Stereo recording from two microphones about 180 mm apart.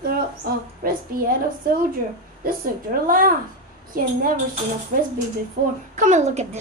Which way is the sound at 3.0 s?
50° right (ahead or behind).